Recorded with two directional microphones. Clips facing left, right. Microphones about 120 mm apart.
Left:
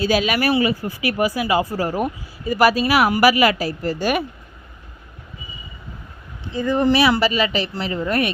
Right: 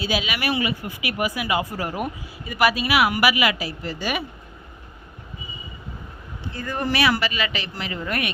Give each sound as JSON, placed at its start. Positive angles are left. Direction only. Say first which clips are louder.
{"t": 0.0, "sound": "speech", "louder": "left 7 dB", "side_deg": 45}
{"t": 6.5, "sound": "speech", "louder": "left 9 dB", "side_deg": 20}